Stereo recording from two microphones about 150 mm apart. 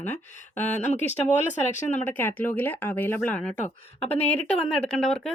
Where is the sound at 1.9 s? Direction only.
10° left (ahead or behind).